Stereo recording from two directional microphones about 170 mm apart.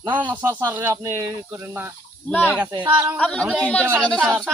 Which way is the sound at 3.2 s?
5° left (ahead or behind).